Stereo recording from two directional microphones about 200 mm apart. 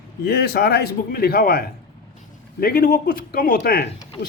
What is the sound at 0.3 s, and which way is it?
Speech, 50° left (ahead or behind).